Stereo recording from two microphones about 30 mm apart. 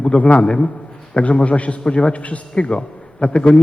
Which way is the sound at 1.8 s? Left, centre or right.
Left.